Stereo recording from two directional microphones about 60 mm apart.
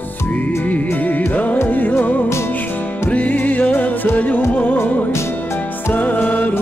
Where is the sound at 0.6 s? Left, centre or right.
Left.